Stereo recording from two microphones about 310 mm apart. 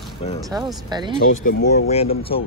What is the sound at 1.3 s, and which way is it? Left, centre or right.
Speech, left.